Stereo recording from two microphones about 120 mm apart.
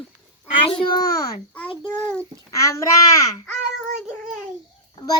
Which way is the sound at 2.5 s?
25° left (ahead or behind).